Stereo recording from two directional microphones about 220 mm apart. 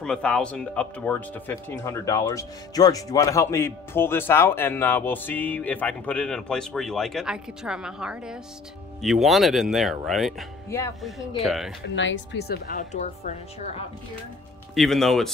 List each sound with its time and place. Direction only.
0.0 s speech: 5° left (ahead or behind)
11.8 s a woman's voice: 55° left (ahead or behind); by 13.7 s 30° left (ahead or behind)
14.8 s speech: centre (ahead or behind)